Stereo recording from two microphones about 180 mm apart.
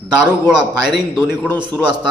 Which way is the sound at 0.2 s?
5° right (ahead or behind).